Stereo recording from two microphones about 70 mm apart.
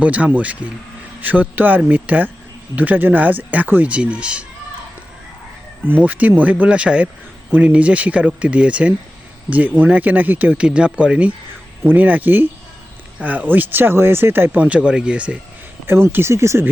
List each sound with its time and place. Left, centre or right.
0.0 s speech: right
6.0 s speech: right
14.5 s speech: centre
15.9 s speech: right